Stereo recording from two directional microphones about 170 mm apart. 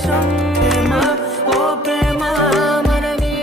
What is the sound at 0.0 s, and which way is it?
Music, centre (ahead or behind).